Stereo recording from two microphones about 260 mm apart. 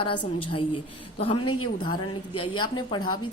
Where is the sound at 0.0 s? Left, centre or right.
Left.